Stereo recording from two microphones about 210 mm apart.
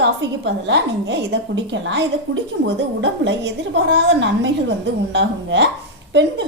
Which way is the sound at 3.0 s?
60° right (ahead or behind).